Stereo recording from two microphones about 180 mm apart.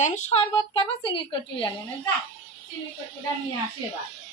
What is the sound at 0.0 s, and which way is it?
A woman's voice, 40° left (ahead or behind).